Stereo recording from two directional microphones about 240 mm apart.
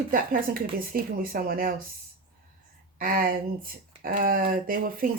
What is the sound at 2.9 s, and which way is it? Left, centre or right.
Speech, right.